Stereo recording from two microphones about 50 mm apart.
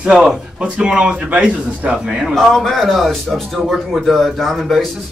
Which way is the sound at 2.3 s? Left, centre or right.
Centre.